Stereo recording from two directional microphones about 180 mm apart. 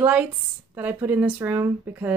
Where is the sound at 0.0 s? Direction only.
10° right (ahead or behind).